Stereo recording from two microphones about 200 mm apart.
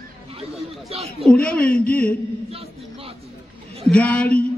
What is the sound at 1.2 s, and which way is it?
Speech, 5° left (ahead or behind).